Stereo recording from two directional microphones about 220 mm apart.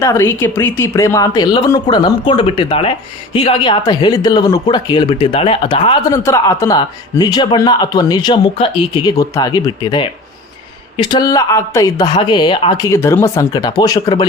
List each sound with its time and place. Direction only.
0.0 s speech: 10° left (ahead or behind)
12.9 s speech: 10° left (ahead or behind)